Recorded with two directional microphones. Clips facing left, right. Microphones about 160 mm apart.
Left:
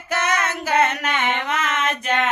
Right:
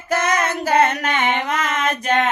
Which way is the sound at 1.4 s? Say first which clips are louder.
Right 2 dB; 35° right (ahead or behind).